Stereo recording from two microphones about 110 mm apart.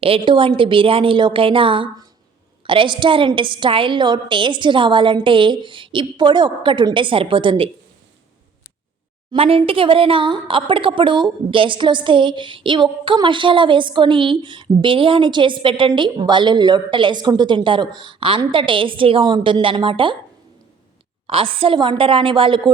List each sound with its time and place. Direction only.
0.0 s speech: 55° right (ahead or behind)
9.3 s speech: 60° right (ahead or behind)
21.2 s speech: 55° right (ahead or behind)